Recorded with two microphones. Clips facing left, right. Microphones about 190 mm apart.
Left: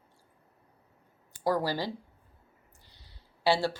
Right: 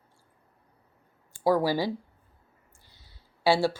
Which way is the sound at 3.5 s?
10° right (ahead or behind).